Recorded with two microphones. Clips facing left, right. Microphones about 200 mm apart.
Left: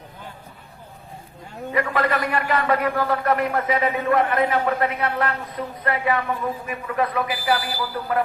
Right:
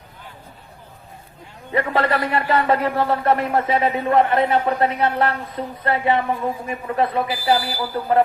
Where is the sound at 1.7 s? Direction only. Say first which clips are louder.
Right 2 dB; 30° right (ahead or behind).